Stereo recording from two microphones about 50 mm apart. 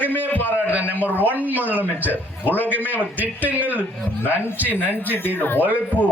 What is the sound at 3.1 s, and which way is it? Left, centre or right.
A man's voice, right.